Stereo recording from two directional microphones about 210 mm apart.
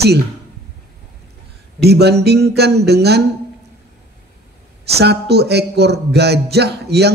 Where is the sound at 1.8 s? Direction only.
50° right (ahead or behind).